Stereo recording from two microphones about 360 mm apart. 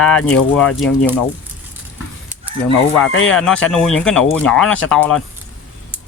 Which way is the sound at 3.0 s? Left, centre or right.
Left.